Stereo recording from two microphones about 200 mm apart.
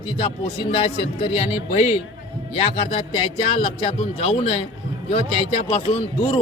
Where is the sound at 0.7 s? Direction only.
25° left (ahead or behind).